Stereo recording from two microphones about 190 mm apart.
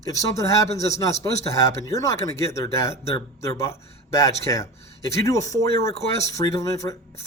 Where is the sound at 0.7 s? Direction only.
35° left (ahead or behind).